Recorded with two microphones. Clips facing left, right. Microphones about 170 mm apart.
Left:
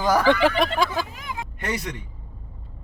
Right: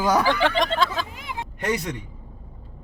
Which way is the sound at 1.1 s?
25° right (ahead or behind).